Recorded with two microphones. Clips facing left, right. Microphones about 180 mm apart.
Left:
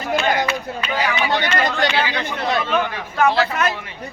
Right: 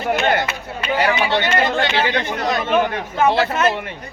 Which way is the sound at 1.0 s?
25° right (ahead or behind).